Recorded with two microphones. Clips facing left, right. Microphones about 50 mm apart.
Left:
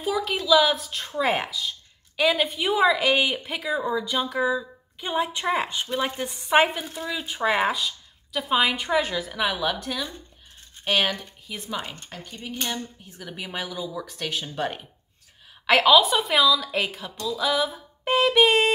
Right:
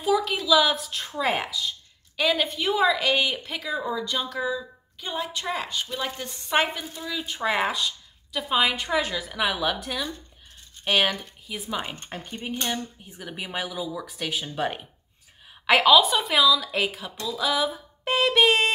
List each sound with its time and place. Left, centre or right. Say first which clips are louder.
0.0 s a woman's voice: right 2 dB; centre
11.9 s speech: right 3 dB; right
12.6 s speech: right 1 dB; centre